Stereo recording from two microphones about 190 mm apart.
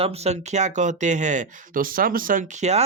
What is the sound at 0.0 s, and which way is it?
Speech, 35° right (ahead or behind).